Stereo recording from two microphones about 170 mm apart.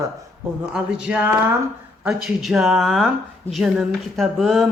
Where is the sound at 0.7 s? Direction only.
5° right (ahead or behind).